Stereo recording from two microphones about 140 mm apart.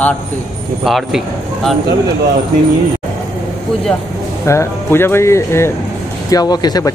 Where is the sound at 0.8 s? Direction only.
Centre (ahead or behind).